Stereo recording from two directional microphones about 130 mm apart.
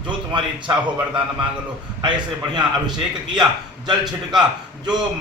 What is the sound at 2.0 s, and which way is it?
Speech, 35° right (ahead or behind).